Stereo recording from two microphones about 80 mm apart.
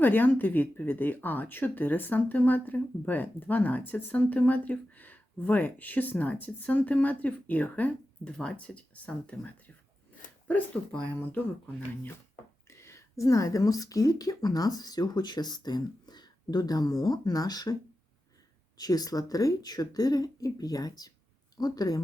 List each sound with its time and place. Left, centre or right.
0.0 s speech: left
11.3 s speech: left
12.6 s a woman's voice: left
18.8 s speech: left